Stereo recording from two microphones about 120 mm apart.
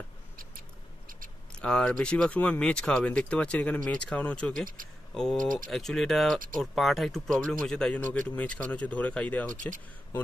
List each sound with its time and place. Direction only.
1.6 s speech: 10° left (ahead or behind)
9.5 s speech: 90° right